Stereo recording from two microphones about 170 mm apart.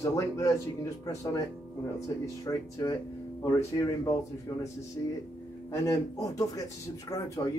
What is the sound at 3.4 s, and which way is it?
Speech, 15° left (ahead or behind).